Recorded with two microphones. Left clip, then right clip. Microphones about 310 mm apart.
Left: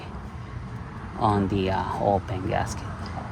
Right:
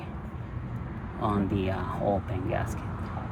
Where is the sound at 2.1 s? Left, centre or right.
Left.